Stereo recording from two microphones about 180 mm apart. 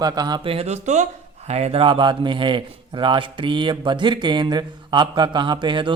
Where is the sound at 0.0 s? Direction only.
20° right (ahead or behind).